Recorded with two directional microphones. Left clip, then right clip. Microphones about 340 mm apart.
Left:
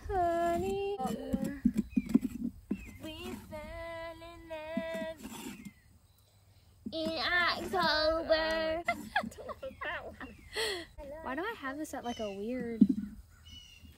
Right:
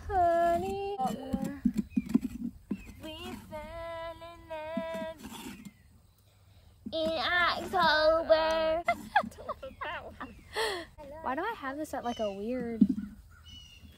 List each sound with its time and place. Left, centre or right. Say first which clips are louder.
0.0 s child singing: right 5 dB; centre
1.0 s wild animals: right 2 dB; centre
6.9 s child singing: right 3 dB; centre
9.1 s a sound: right 5 dB; centre
13.5 s crow: right 1 dB; left